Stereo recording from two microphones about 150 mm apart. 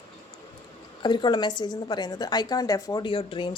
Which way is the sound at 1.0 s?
30° left (ahead or behind).